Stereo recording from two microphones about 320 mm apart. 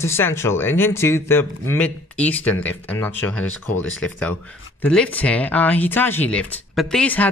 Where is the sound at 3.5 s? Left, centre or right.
Left.